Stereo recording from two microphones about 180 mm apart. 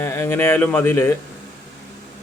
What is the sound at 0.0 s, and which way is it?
Speech, 15° left (ahead or behind).